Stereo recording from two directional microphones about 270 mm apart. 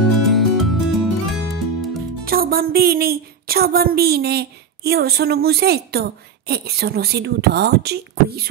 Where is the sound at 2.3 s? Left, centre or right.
Right.